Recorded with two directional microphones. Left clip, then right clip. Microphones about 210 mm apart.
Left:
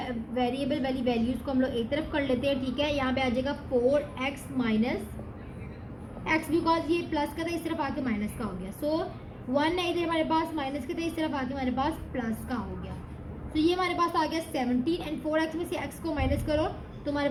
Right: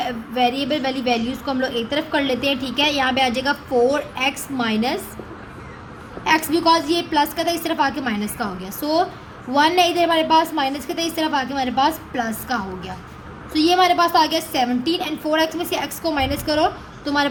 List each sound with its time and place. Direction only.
0.0 s a woman's voice: 30° right (ahead or behind)
6.2 s a woman's voice: 35° right (ahead or behind)